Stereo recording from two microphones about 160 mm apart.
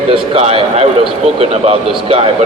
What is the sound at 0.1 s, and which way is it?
Speech, 35° right (ahead or behind).